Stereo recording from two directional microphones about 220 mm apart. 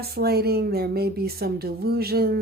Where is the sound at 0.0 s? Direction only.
45° right (ahead or behind).